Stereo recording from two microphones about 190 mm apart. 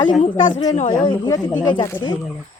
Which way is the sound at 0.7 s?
30° left (ahead or behind).